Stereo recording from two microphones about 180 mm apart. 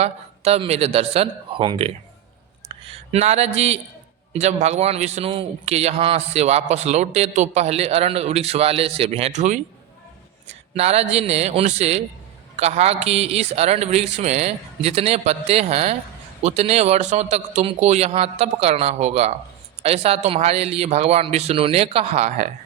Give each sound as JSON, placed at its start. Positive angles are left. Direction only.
{"t": 0.0, "sound": "a man's voice", "side_deg": -35}
{"t": 2.6, "sound": "a sound", "side_deg": -35}
{"t": 4.3, "sound": "a man's voice", "side_deg": -40}